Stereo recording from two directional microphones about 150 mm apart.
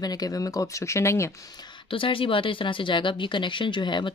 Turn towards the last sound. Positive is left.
turn(degrees=30)  # may be behind; listen again after turning